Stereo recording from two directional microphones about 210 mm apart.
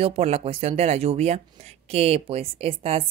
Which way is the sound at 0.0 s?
30° right (ahead or behind).